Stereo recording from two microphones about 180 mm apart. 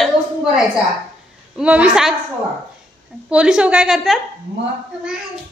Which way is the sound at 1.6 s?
5° right (ahead or behind).